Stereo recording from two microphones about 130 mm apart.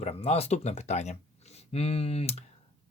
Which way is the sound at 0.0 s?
50° left (ahead or behind).